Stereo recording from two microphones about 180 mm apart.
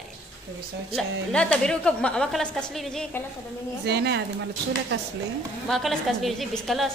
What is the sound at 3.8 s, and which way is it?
Speech, 70° right (ahead or behind).